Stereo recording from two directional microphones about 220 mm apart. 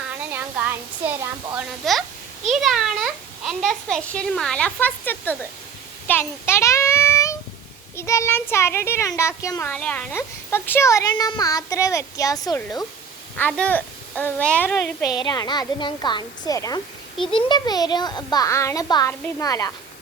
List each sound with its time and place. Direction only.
0.2 s a child's voice: 5° right (ahead or behind)
15.1 s speech: 20° left (ahead or behind)